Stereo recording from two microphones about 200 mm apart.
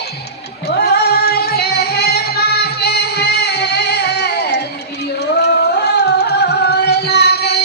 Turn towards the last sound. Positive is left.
turn(degrees=55)  # may be behind; listen again after turning